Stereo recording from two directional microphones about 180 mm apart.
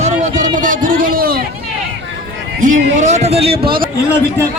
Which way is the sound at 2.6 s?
45° right (ahead or behind).